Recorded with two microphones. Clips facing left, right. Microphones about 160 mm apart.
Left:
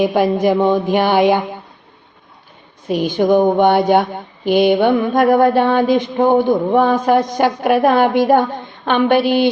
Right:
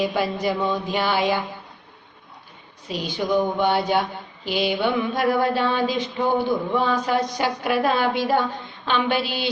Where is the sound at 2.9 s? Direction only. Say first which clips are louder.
Left 9 dB; 55° left (ahead or behind).